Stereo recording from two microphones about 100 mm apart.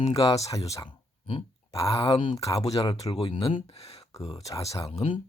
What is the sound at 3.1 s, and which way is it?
Speech, 65° left (ahead or behind).